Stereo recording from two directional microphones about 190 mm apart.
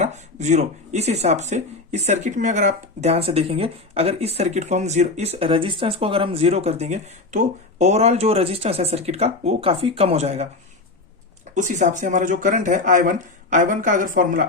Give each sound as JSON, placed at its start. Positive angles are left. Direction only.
{"t": 0.0, "sound": "speech", "side_deg": -40}
{"t": 11.5, "sound": "speech", "side_deg": -40}